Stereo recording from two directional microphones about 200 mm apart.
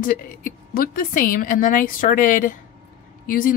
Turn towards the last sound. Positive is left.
turn(degrees=45)  # may be behind; listen again after turning